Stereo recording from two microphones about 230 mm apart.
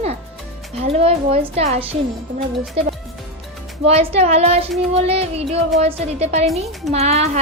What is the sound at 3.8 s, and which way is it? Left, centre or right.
A woman's voice, right.